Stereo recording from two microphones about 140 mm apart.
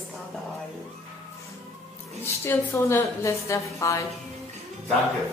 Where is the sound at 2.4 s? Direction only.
20° left (ahead or behind).